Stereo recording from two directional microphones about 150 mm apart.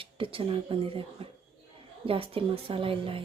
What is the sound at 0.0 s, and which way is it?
A woman's voice, 35° right (ahead or behind).